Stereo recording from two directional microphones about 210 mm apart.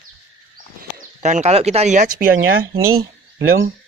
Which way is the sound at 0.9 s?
35° right (ahead or behind).